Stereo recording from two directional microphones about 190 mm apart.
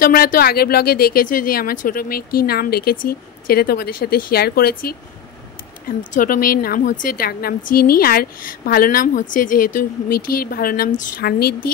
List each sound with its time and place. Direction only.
0.0 s a woman's voice: 50° left (ahead or behind)
6.1 s a woman's voice: 45° left (ahead or behind)